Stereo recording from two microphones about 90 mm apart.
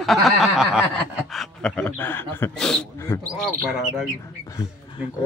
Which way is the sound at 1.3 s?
10° left (ahead or behind).